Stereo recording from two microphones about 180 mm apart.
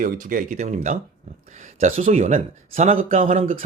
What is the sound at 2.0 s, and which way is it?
Speech, 40° right (ahead or behind).